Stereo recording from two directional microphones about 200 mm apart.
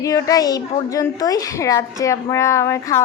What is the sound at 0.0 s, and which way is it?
A woman's voice, 15° left (ahead or behind).